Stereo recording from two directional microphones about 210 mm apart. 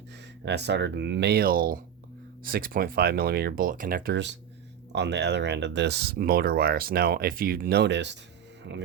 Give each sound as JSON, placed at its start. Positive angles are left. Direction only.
{"t": 0.4, "sound": "speech", "side_deg": -55}